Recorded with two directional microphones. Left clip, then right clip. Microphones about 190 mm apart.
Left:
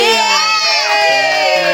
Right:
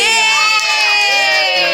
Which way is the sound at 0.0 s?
20° left (ahead or behind).